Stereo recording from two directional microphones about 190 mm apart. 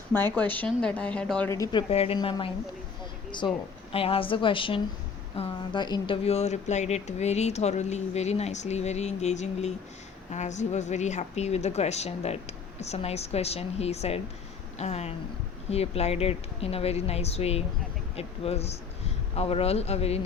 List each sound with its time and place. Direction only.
0.3 s speech: 10° left (ahead or behind)
1.5 s a woman's voice: 20° left (ahead or behind)
1.9 s a woman's voice: 30° left (ahead or behind)